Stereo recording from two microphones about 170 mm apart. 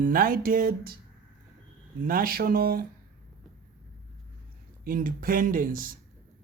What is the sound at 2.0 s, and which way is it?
Speech, 55° right (ahead or behind).